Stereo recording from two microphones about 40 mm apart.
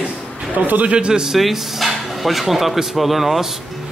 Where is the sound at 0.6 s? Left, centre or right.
Right.